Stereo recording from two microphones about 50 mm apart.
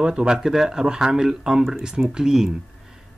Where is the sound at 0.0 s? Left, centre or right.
Centre.